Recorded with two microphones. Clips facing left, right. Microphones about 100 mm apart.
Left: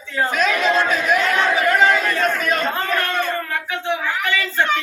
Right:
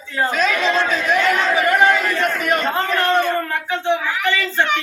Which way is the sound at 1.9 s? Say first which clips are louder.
Even; 5° right (ahead or behind).